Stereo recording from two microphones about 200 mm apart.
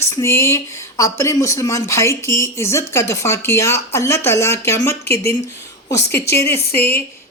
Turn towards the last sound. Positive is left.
turn(degrees=10)  # may be behind; listen again after turning